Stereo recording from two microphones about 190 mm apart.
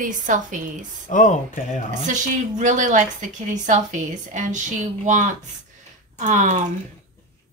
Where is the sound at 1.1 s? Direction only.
45° left (ahead or behind).